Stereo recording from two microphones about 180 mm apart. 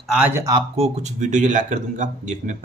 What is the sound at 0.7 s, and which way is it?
Speech, 35° right (ahead or behind).